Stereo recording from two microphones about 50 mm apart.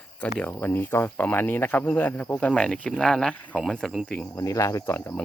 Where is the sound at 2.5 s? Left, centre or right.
Centre.